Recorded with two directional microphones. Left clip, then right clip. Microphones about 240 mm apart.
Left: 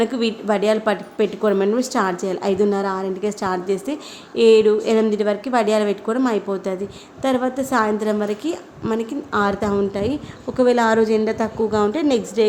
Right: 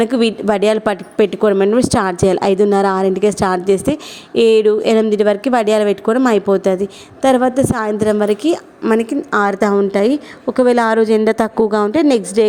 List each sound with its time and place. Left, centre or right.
0.0 s a woman's voice: right